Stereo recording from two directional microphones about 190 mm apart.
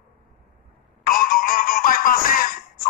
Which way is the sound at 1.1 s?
45° left (ahead or behind).